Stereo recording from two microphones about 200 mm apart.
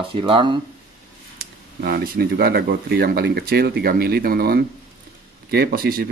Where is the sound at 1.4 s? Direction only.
50° right (ahead or behind).